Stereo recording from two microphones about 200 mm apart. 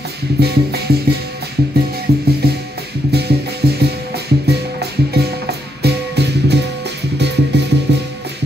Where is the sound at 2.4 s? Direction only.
55° right (ahead or behind).